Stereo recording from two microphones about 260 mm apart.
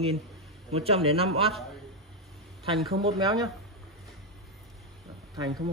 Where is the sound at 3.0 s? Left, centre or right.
Centre.